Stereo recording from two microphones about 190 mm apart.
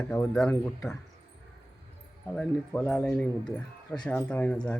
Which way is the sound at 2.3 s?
5° left (ahead or behind).